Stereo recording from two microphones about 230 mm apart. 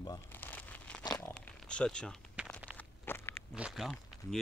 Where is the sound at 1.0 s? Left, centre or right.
Centre.